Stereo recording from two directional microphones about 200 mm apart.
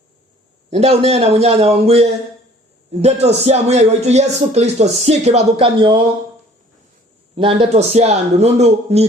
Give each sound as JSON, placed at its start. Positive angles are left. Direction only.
{"t": 0.7, "sound": "speech", "side_deg": -30}
{"t": 7.3, "sound": "speech", "side_deg": -25}